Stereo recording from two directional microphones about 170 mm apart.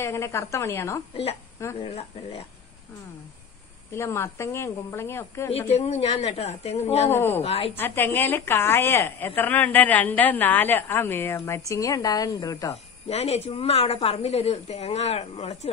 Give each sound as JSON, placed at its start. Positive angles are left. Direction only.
{"t": 0.0, "sound": "a woman's voice", "side_deg": 15}
{"t": 1.8, "sound": "a woman's voice", "side_deg": 35}
{"t": 3.9, "sound": "a woman's voice", "side_deg": 15}
{"t": 5.7, "sound": "a woman's voice", "side_deg": 40}
{"t": 7.1, "sound": "a woman's voice", "side_deg": 15}
{"t": 7.4, "sound": "a woman's voice", "side_deg": 35}
{"t": 7.7, "sound": "a woman's voice", "side_deg": 10}
{"t": 13.1, "sound": "a woman's voice", "side_deg": 40}